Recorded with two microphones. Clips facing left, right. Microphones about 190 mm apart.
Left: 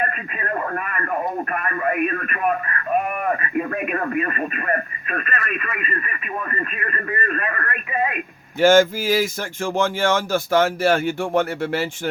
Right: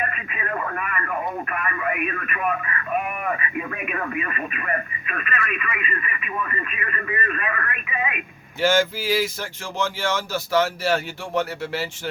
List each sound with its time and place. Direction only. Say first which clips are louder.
0.1 s radio: left 2 dB; 40° left (ahead or behind)
3.3 s speech: left 5 dB; 45° left (ahead or behind)
7.2 s telephone: left 2 dB; 40° left (ahead or behind)
8.6 s speech: left 6 dB; 50° left (ahead or behind)